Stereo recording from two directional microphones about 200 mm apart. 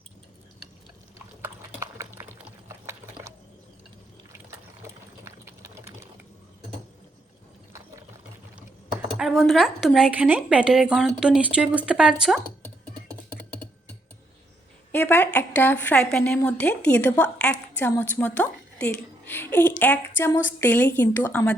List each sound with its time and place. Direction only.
1.4 s sewing machine: 15° right (ahead or behind)
9.1 s speech: 5° right (ahead or behind)
14.9 s a woman's voice: 10° left (ahead or behind)